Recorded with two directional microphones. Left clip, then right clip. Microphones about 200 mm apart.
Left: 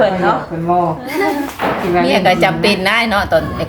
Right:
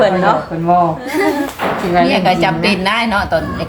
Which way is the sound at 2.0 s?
15° left (ahead or behind).